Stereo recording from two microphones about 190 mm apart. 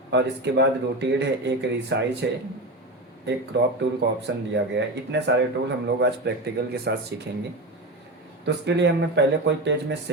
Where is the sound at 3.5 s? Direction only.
65° right (ahead or behind).